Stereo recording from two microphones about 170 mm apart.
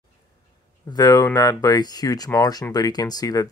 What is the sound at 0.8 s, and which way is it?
Speech, 25° left (ahead or behind).